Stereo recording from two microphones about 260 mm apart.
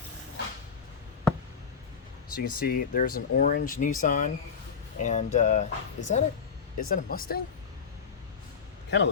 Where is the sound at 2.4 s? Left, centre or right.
Left.